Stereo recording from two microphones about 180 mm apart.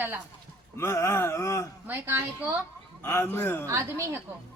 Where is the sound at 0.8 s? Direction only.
15° left (ahead or behind).